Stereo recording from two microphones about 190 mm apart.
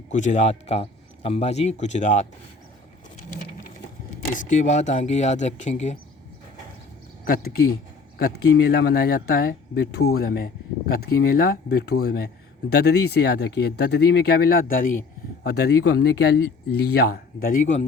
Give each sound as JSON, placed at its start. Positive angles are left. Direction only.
{"t": 0.1, "sound": "speech", "side_deg": 40}
{"t": 4.4, "sound": "speech", "side_deg": 40}
{"t": 7.3, "sound": "speech", "side_deg": 50}
{"t": 15.4, "sound": "speech", "side_deg": 60}